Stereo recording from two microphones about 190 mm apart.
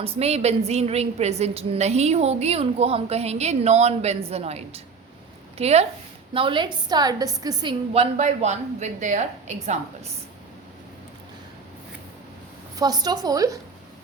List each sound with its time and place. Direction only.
0.0 s a woman's voice: 35° right (ahead or behind)
12.7 s a woman's voice: 20° right (ahead or behind)